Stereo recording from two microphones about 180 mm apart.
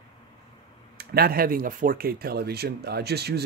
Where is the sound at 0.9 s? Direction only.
60° right (ahead or behind).